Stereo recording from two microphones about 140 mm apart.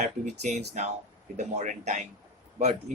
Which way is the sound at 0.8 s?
60° right (ahead or behind).